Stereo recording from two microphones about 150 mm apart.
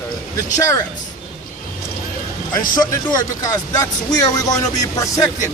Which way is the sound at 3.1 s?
25° left (ahead or behind).